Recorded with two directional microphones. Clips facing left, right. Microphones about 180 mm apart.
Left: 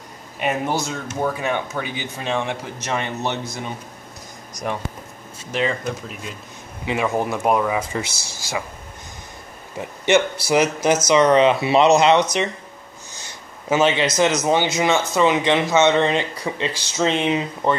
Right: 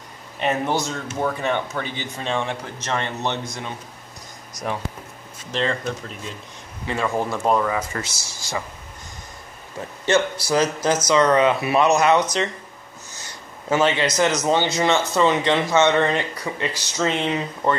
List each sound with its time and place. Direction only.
0.4 s speech: 5° left (ahead or behind)
5.5 s speech: 10° left (ahead or behind)
9.8 s speech: 20° left (ahead or behind)
10.5 s speech: 10° left (ahead or behind)
13.7 s speech: 20° left (ahead or behind)